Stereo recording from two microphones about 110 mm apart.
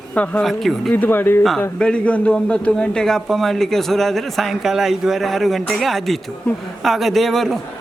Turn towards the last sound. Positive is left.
turn(degrees=0)  # may be behind; listen again after turning